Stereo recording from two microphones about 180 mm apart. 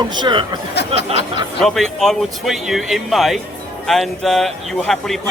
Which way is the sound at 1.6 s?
Centre (ahead or behind).